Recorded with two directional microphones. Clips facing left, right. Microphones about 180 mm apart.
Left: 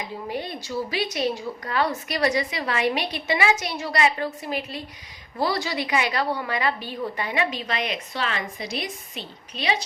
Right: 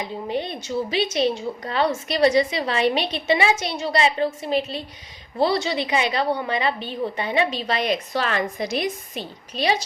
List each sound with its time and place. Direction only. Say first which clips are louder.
0.0 s a woman's voice: right 4 dB; 25° right (ahead or behind); by 9.7 s 40° right (ahead or behind)